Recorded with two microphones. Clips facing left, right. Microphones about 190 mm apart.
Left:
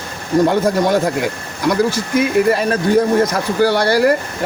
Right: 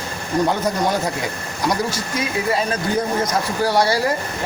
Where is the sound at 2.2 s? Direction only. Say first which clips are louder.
Left 8 dB; 60° left (ahead or behind).